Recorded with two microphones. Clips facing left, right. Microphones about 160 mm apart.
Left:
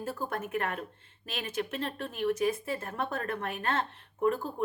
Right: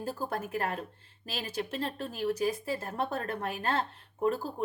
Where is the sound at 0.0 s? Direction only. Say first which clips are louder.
Even; 35° right (ahead or behind).